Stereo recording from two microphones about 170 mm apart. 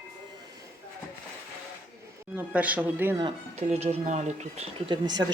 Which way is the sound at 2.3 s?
10° right (ahead or behind).